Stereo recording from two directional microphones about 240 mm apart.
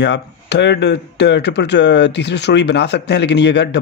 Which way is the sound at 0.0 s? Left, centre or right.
Left.